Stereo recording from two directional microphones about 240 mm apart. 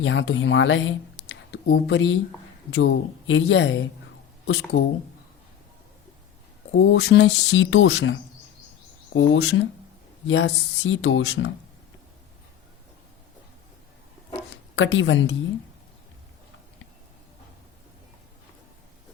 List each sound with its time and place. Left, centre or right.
0.0 s speech: left
6.7 s speech: left
14.5 s speech: left